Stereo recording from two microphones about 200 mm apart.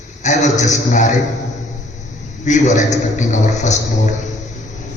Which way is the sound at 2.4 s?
35° left (ahead or behind).